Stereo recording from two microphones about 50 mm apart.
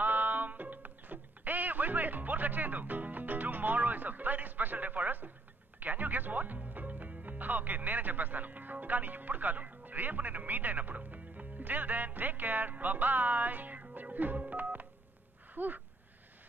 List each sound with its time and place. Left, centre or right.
0.0 s music: right
5.8 s speech: right
14.4 s telephone dialing: right
15.5 s a sound: right